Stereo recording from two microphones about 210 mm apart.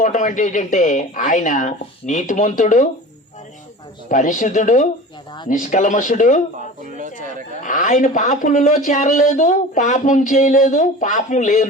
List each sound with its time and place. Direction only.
0.0 s a man's voice: 35° left (ahead or behind)
4.1 s a man's voice: 35° left (ahead or behind)
6.9 s speech: 35° right (ahead or behind)
7.6 s a man's voice: 35° left (ahead or behind)